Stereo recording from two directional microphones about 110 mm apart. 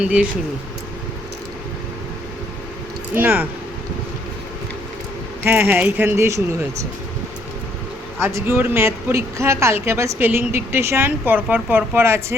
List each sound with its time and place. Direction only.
0.0 s speech: 10° right (ahead or behind)
3.2 s speech: 15° right (ahead or behind)
5.4 s speech: 20° right (ahead or behind)
8.2 s speech: 25° right (ahead or behind)